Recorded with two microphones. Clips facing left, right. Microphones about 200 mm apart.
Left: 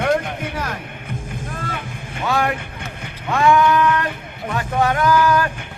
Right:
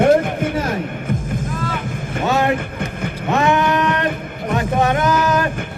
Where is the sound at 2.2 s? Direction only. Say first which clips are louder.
Right 3 dB; 25° right (ahead or behind).